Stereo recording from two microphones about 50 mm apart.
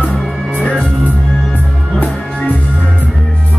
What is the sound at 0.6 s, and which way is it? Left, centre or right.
Music, left.